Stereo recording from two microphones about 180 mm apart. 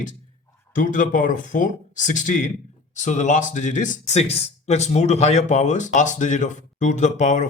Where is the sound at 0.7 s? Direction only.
45° left (ahead or behind).